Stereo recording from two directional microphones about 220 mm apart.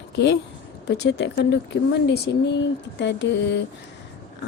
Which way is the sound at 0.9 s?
50° left (ahead or behind).